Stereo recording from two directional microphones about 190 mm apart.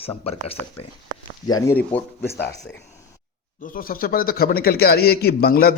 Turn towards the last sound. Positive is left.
turn(degrees=55)  # may be behind; listen again after turning